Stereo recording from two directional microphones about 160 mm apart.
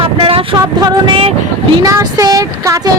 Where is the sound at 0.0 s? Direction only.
35° right (ahead or behind).